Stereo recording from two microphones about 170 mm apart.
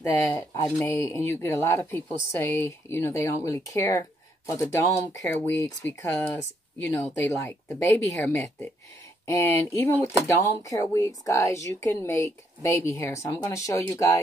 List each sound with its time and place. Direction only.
0.0 s speech: 15° left (ahead or behind)